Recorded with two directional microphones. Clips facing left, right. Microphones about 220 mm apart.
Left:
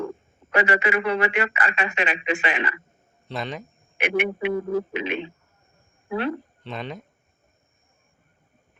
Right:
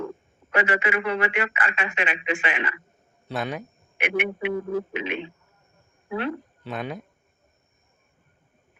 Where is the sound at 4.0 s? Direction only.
35° left (ahead or behind).